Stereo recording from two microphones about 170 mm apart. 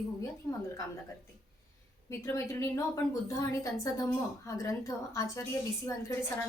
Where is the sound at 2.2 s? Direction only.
15° left (ahead or behind).